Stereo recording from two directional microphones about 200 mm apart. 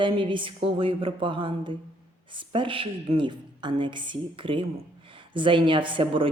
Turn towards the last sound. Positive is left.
turn(degrees=-25)  # may be behind; listen again after turning